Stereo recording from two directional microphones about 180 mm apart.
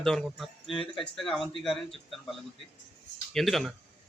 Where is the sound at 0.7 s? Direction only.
30° left (ahead or behind).